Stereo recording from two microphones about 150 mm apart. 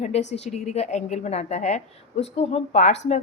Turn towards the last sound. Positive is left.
turn(degrees=45)  # may be behind; listen again after turning